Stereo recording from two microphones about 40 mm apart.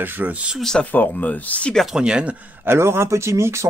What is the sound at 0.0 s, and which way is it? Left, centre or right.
Speech, right.